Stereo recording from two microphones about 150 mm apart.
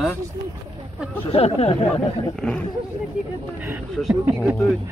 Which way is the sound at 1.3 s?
45° left (ahead or behind).